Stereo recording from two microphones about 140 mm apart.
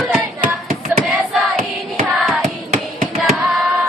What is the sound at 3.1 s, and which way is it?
Hands, centre (ahead or behind).